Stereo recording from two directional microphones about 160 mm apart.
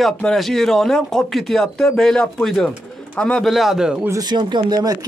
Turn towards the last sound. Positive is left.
turn(degrees=-25)  # may be behind; listen again after turning